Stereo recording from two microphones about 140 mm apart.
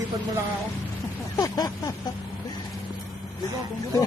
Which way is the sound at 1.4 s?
30° left (ahead or behind).